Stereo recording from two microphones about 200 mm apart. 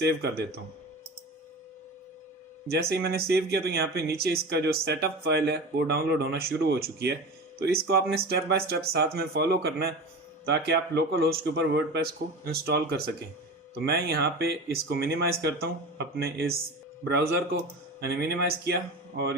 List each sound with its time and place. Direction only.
0.0 s speech: 55° right (ahead or behind)
2.9 s speech: 50° right (ahead or behind)